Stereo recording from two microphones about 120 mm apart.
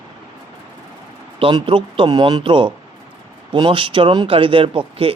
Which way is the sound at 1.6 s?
45° right (ahead or behind).